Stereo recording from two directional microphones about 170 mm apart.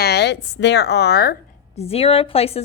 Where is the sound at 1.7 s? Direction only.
35° left (ahead or behind).